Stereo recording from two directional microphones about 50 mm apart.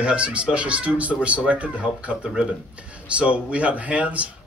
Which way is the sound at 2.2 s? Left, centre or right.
Centre.